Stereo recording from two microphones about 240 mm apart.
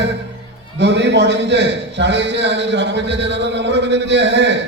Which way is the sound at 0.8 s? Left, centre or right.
Right.